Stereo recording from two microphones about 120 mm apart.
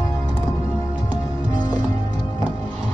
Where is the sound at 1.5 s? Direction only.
35° left (ahead or behind).